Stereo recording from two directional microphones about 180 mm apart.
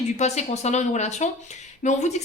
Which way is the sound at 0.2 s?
40° left (ahead or behind).